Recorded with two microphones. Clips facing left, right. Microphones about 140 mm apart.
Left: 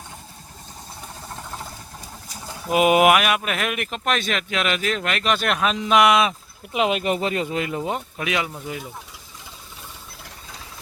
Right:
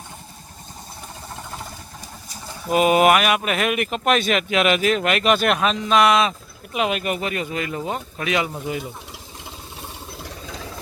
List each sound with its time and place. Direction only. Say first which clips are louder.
2.6 s speech: even; 10° left (ahead or behind)
5.8 s speech: left 1 dB; 15° left (ahead or behind)
6.7 s speech: left 2 dB; 25° left (ahead or behind)
8.3 s speech: right 4 dB; centre (ahead or behind)